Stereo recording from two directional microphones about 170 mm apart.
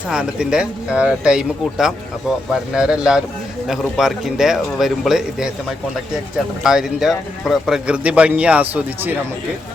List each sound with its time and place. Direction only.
0.1 s a man's voice: 5° right (ahead or behind)